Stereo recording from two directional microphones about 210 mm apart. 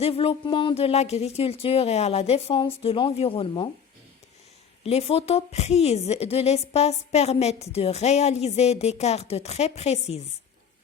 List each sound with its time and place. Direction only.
0.0 s speech: 30° left (ahead or behind)
4.9 s a woman's voice: 30° left (ahead or behind)